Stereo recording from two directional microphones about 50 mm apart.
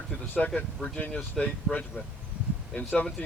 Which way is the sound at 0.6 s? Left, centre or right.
Centre.